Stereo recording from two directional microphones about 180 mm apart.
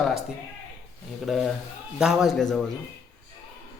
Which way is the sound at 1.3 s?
Centre (ahead or behind).